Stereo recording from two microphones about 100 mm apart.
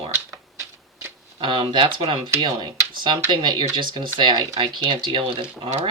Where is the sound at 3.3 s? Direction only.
50° right (ahead or behind).